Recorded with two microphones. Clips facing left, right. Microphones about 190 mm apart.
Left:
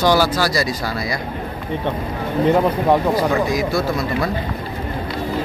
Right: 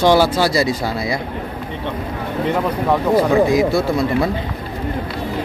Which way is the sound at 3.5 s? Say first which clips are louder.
Right 4 dB; 25° right (ahead or behind).